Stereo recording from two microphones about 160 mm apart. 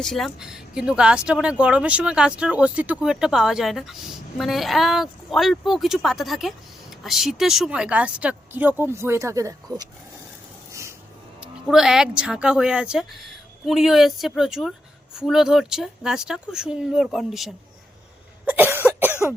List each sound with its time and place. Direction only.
0.0 s speech: centre (ahead or behind); by 9.9 s 25° right (ahead or behind)
10.7 s a sound: 20° right (ahead or behind)
11.3 s speech: 5° right (ahead or behind)
18.4 s cough: 10° right (ahead or behind)